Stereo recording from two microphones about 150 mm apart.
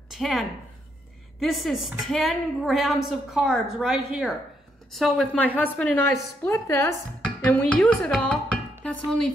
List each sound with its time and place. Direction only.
0.1 s a woman's voice: centre (ahead or behind); by 7.0 s 20° left (ahead or behind)
7.2 s speech: 10° left (ahead or behind)